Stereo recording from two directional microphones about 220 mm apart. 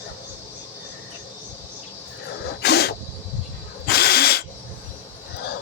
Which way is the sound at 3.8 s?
45° left (ahead or behind).